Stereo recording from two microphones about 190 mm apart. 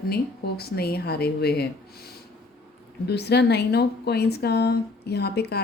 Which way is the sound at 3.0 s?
60° left (ahead or behind).